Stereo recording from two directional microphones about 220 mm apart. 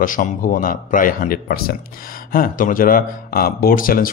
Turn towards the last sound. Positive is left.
turn(degrees=40)  # may be behind; listen again after turning